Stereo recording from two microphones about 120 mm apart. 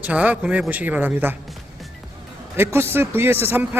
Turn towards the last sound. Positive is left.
turn(degrees=-15)  # may be behind; listen again after turning